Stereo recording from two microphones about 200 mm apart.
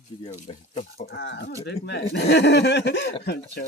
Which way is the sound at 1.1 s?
60° left (ahead or behind).